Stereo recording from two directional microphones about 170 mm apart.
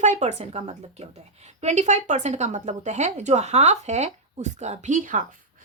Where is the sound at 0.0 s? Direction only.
45° right (ahead or behind).